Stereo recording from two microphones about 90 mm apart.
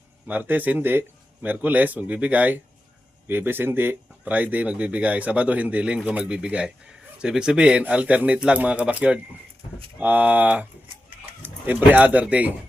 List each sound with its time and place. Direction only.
0.3 s speech: 20° right (ahead or behind)